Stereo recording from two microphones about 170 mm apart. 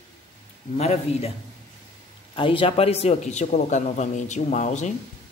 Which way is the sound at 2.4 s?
30° left (ahead or behind).